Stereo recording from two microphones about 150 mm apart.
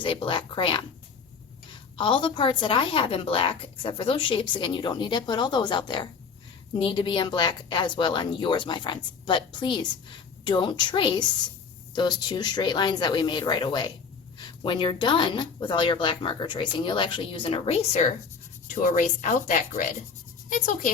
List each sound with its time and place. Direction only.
0.0 s speech: 35° left (ahead or behind)
2.0 s speech: 35° left (ahead or behind)
18.7 s speech: 55° left (ahead or behind)